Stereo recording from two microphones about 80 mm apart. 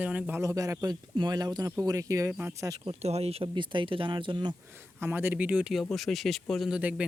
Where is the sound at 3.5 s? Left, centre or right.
Right.